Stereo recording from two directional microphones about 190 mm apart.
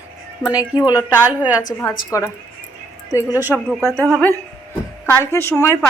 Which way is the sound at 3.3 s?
10° right (ahead or behind).